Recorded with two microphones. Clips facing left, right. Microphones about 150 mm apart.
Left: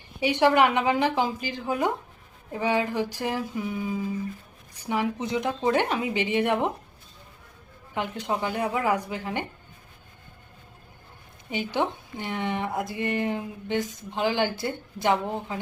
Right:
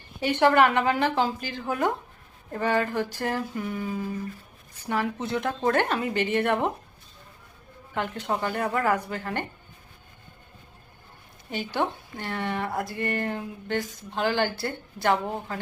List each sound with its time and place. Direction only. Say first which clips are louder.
0.2 s speech: even; 15° left (ahead or behind)
7.9 s speech: even; 15° left (ahead or behind)
11.5 s speech: left 1 dB; 15° left (ahead or behind)